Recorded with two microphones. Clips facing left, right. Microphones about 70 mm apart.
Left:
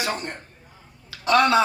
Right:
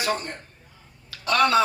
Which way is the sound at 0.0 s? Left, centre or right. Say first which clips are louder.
Right 1 dB; left.